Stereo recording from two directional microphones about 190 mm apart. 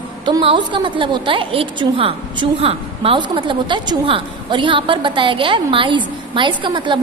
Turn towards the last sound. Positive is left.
turn(degrees=-25)  # may be behind; listen again after turning